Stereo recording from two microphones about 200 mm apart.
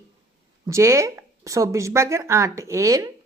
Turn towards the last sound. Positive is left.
turn(degrees=-15)  # may be behind; listen again after turning